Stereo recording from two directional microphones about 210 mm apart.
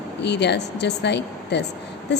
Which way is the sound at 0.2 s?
55° left (ahead or behind).